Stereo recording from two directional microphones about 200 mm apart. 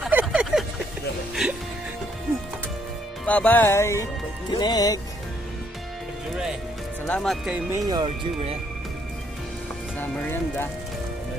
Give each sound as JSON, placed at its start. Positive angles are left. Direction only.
{"t": 0.0, "sound": "a sound", "side_deg": -5}
{"t": 1.4, "sound": "music", "side_deg": -5}
{"t": 3.3, "sound": "speech", "side_deg": 10}
{"t": 7.1, "sound": "speech", "side_deg": 0}
{"t": 7.9, "sound": "speech", "side_deg": -25}
{"t": 9.9, "sound": "speech", "side_deg": 10}